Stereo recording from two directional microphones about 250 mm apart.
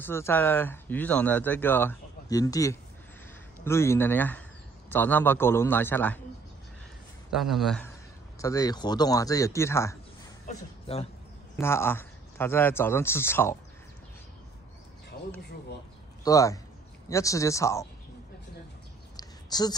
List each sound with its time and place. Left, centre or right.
0.0 s a man's voice: centre
7.3 s a man's voice: centre
8.4 s speech: centre
10.4 s a sound: left
11.6 s speech: centre
16.3 s speech: centre
19.1 s a sound: centre